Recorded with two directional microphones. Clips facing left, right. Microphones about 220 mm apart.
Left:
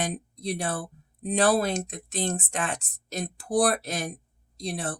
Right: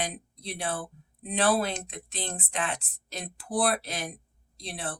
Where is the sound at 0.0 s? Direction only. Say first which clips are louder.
Left 5 dB; 45° left (ahead or behind).